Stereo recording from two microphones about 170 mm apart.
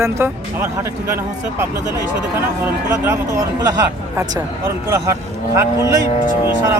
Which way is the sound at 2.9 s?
15° right (ahead or behind).